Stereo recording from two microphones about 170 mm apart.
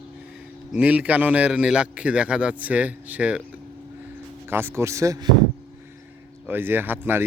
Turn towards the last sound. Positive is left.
turn(degrees=-10)  # may be behind; listen again after turning